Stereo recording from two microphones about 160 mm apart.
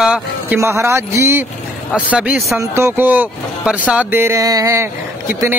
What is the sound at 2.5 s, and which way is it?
Speech, 15° right (ahead or behind).